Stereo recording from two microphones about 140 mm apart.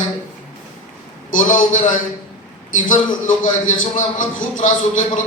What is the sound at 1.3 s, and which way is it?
A man's voice, 70° left (ahead or behind).